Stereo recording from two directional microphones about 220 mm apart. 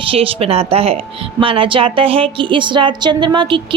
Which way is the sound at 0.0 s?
25° right (ahead or behind).